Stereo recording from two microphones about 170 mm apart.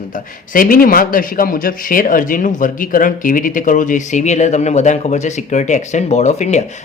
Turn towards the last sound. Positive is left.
turn(degrees=40)  # may be behind; listen again after turning